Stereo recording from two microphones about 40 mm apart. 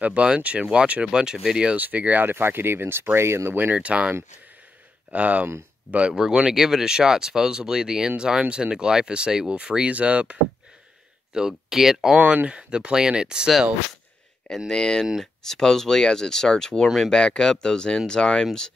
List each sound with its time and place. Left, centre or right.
0.0 s speech: right
1.0 s speech: centre
1.8 s speech: right
2.2 s speech: right
3.2 s speech: right
3.7 s speech: right
5.1 s speech: right
6.1 s speech: centre; by 10.4 s right
11.3 s speech: centre
12.4 s speech: right
14.7 s speech: centre
17.1 s speech: left